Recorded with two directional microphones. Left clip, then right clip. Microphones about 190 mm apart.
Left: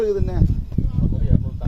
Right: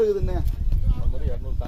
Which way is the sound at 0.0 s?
45° left (ahead or behind).